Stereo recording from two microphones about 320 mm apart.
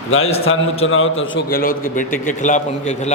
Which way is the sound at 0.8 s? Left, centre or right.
Left.